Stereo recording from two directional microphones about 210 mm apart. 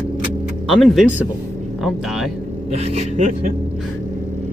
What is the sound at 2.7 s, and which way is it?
Speech, 30° right (ahead or behind).